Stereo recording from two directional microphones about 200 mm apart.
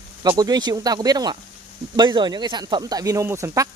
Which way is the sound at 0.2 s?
20° right (ahead or behind).